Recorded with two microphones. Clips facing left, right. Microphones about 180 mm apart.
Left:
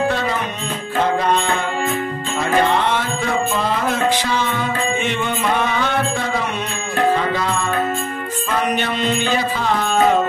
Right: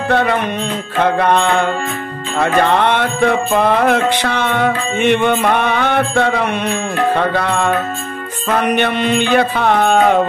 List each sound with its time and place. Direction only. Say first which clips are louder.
0.1 s music: right 6 dB; 60° right (ahead or behind)